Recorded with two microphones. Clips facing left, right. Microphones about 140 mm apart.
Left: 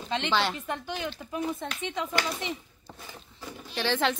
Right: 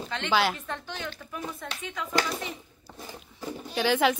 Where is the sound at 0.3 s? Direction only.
5° right (ahead or behind).